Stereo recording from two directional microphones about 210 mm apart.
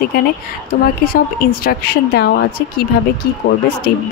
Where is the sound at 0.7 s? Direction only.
45° left (ahead or behind).